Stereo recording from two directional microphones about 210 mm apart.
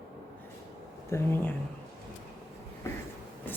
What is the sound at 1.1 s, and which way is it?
Speech, 10° left (ahead or behind).